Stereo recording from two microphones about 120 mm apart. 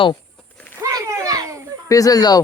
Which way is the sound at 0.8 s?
25° right (ahead or behind).